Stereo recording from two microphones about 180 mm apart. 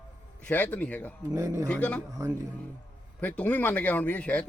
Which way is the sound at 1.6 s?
5° left (ahead or behind).